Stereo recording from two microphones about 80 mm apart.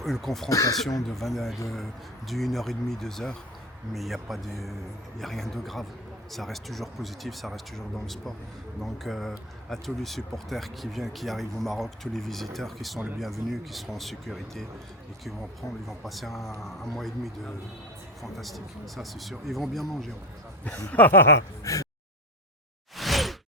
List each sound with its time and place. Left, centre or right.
0.0 s speech: centre
15.9 s speech: centre
20.7 s speech: centre
21.6 s speech: left
23.0 s whoosh: centre